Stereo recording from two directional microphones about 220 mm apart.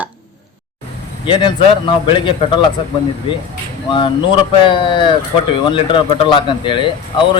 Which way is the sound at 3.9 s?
20° left (ahead or behind).